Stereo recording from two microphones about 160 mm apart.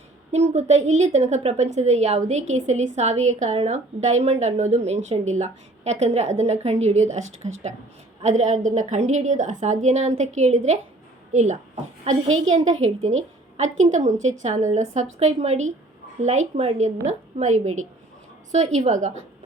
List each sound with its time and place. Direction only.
0.3 s a woman's voice: 45° right (ahead or behind)